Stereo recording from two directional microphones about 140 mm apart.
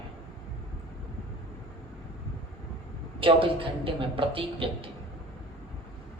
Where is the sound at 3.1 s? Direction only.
40° right (ahead or behind).